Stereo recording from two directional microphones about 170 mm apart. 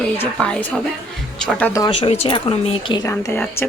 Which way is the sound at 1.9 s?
35° left (ahead or behind).